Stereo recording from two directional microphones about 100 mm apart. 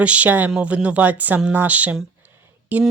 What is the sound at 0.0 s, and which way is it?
Speech, 15° right (ahead or behind).